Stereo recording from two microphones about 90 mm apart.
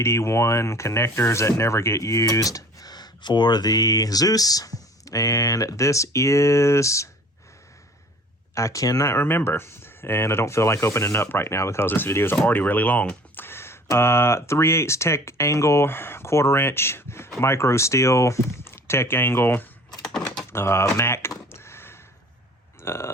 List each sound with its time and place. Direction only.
0.0 s speech: 30° left (ahead or behind)
8.5 s speech: 35° left (ahead or behind)
20.1 s a sound: 10° left (ahead or behind)
20.5 s speech: 30° left (ahead or behind)
20.9 s a sound: 30° left (ahead or behind)
22.8 s speech: 30° left (ahead or behind)